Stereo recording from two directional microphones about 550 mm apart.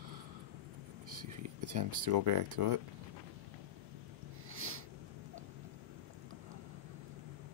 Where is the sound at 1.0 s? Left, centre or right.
Right.